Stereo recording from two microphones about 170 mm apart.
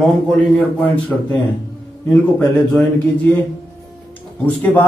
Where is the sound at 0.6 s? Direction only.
10° left (ahead or behind).